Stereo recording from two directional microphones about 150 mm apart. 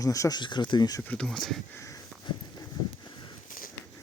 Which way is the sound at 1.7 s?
20° left (ahead or behind).